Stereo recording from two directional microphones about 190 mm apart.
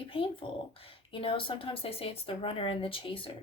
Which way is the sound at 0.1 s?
30° left (ahead or behind).